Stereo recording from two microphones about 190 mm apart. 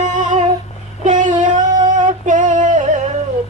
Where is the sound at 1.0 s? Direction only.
40° right (ahead or behind).